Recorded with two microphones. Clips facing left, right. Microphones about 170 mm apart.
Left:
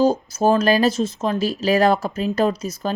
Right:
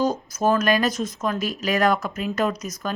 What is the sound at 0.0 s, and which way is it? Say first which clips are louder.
Speech: left 5 dB; 30° left (ahead or behind).